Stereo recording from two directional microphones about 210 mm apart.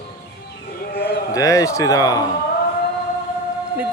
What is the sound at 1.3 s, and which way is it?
Speech, 15° left (ahead or behind).